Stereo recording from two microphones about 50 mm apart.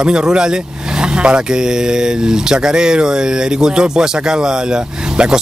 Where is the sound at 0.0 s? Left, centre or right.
Centre.